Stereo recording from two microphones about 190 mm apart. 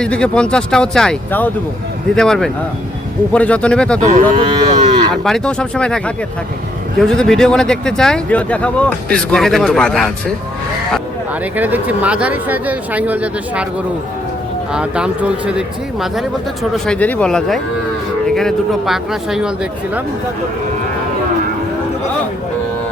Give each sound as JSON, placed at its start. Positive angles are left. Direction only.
{"t": 0.0, "sound": "speech", "side_deg": 5}
{"t": 4.4, "sound": "moo", "side_deg": -35}
{"t": 5.1, "sound": "speech", "side_deg": 0}
{"t": 11.5, "sound": "speech", "side_deg": -10}
{"t": 14.7, "sound": "speech", "side_deg": -5}